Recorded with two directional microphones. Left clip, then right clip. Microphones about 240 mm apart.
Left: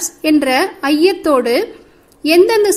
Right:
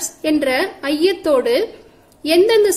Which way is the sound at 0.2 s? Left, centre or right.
Centre.